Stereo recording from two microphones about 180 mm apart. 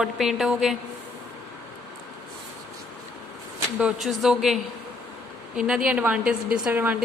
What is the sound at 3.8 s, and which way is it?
Speech, centre (ahead or behind).